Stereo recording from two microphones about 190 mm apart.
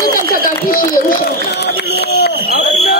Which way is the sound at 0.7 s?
50° left (ahead or behind).